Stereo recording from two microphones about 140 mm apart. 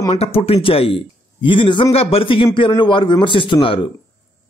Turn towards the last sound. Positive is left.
turn(degrees=35)  # may be behind; listen again after turning